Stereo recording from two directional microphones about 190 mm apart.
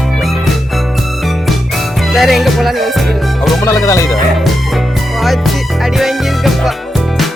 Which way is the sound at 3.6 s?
15° left (ahead or behind).